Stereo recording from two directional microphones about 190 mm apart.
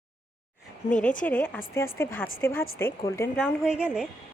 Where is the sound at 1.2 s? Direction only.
5° left (ahead or behind).